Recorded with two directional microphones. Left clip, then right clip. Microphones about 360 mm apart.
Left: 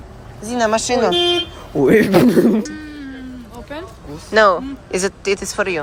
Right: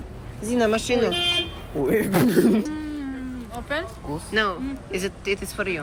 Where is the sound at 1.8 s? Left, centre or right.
Left.